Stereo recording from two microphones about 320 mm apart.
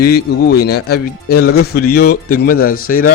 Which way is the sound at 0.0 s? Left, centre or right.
Left.